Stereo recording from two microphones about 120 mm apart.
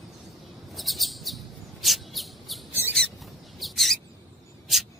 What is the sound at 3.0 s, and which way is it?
Mouse, centre (ahead or behind).